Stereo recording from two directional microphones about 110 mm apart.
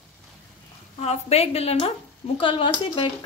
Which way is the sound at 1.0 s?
70° left (ahead or behind).